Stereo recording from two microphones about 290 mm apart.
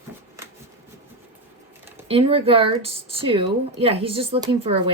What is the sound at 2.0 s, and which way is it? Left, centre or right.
Speech, centre.